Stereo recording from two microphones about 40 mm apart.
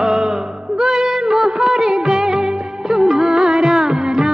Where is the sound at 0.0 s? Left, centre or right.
Centre.